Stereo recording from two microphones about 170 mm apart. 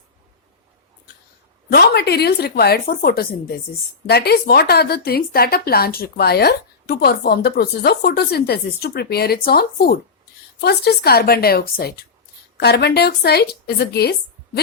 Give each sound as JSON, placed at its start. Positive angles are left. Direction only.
{"t": 1.7, "sound": "a woman's voice", "side_deg": 70}